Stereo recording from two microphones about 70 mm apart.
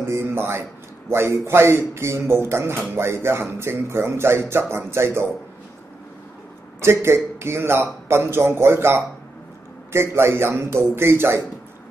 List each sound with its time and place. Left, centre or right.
0.0 s a man's voice: right
6.8 s a man's voice: right